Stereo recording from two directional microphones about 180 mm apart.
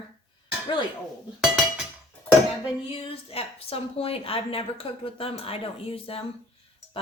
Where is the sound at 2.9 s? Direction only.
30° left (ahead or behind).